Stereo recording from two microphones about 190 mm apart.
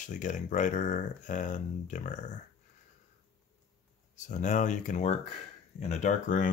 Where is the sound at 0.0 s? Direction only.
40° left (ahead or behind).